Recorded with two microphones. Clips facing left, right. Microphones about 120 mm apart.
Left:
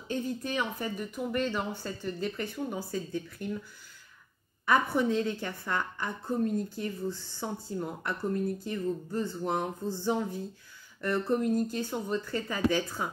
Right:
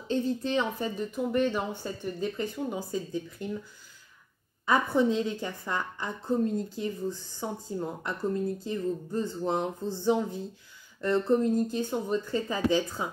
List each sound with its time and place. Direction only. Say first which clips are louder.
0.1 s speech: right 5 dB; 25° right (ahead or behind)
4.6 s speech: right 2 dB; 20° right (ahead or behind)